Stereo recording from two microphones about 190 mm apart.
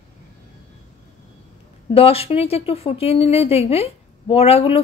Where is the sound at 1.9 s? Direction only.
30° left (ahead or behind).